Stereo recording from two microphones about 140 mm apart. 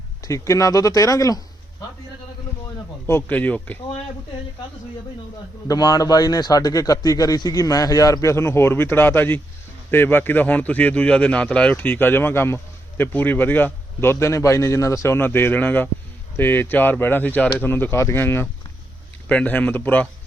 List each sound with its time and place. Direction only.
0.2 s a man's voice: 25° left (ahead or behind)
3.1 s a man's voice: 15° left (ahead or behind)
5.6 s a man's voice: 30° left (ahead or behind); by 20.1 s 10° left (ahead or behind)